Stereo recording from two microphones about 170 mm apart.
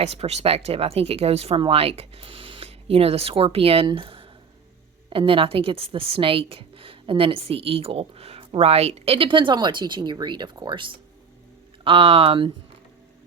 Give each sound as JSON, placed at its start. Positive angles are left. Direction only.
{"t": 0.0, "sound": "a woman's voice", "side_deg": -40}